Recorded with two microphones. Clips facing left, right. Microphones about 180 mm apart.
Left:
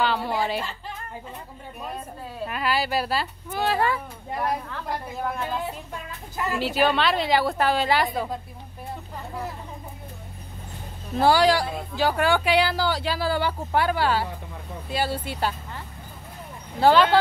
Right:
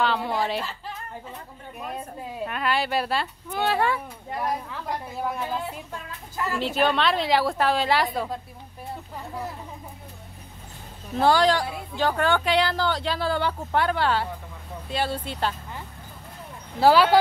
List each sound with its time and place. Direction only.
0.0 s speech: centre (ahead or behind)
2.4 s a woman's voice: 5° left (ahead or behind)
6.3 s speech: 15° left (ahead or behind)
6.6 s a woman's voice: 5° left (ahead or behind)
11.1 s a woman's voice: 5° left (ahead or behind)
16.8 s a woman's voice: 5° right (ahead or behind)